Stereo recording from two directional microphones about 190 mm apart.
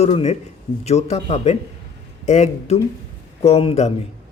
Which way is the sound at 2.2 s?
35° left (ahead or behind).